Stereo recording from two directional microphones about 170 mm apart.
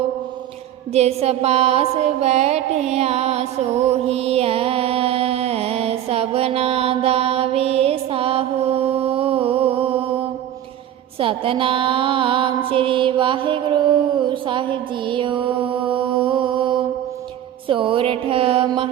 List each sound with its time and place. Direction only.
0.9 s music: 40° right (ahead or behind)
11.2 s mantra: 30° right (ahead or behind)
17.7 s a sound: 30° right (ahead or behind)